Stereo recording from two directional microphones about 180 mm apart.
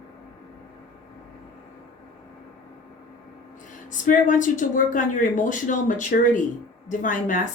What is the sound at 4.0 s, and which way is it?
A woman's voice, 45° left (ahead or behind).